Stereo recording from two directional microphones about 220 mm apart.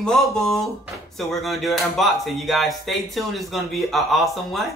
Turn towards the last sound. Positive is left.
turn(degrees=0)  # may be behind; listen again after turning